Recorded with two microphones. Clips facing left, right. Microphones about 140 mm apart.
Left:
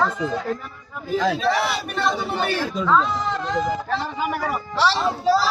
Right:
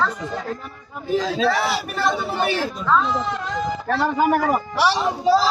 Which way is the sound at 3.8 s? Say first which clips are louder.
Right 6 dB; 55° right (ahead or behind).